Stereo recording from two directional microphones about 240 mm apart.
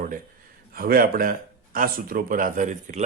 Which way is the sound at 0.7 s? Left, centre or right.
Right.